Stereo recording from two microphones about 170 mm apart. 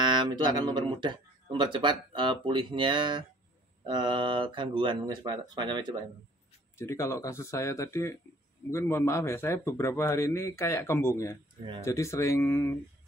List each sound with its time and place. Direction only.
0.0 s speech: 25° right (ahead or behind)
6.8 s speech: 15° left (ahead or behind)